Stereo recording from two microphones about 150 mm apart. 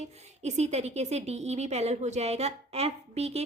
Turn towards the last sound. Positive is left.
turn(degrees=-45)  # may be behind; listen again after turning